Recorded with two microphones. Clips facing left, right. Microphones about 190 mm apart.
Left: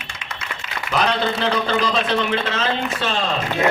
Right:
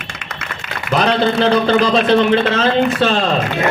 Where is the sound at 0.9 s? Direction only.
30° right (ahead or behind).